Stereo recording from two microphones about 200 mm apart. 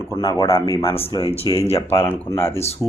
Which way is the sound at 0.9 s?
25° left (ahead or behind).